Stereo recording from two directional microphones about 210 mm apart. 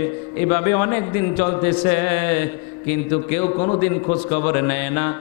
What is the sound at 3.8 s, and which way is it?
A man's voice, 15° left (ahead or behind).